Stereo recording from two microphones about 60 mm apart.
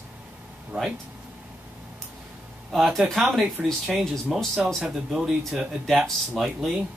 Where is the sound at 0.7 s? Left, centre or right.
Right.